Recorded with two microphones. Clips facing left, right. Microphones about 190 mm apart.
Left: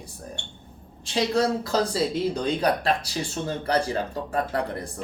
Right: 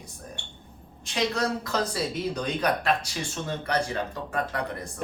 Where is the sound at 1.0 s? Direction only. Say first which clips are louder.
Left 4 dB; 30° left (ahead or behind).